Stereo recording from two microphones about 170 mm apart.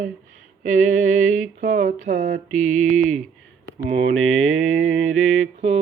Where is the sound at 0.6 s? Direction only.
50° right (ahead or behind).